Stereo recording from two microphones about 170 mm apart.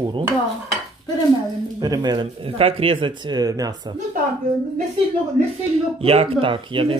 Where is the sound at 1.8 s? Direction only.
25° right (ahead or behind).